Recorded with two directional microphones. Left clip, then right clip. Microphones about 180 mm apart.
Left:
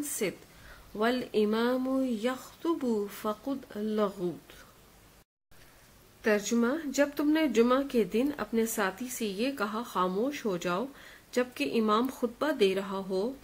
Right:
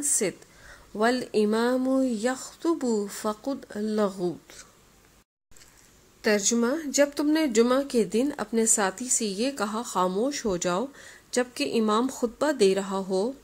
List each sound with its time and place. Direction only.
0.2 s speech: 40° right (ahead or behind)
6.5 s speech: 30° right (ahead or behind)